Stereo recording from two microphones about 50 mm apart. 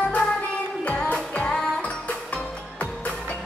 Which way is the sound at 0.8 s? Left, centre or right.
Left.